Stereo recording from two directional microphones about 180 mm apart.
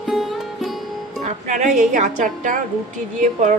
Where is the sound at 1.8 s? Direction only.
40° right (ahead or behind).